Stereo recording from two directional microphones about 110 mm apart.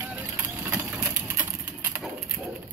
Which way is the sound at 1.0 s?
15° right (ahead or behind).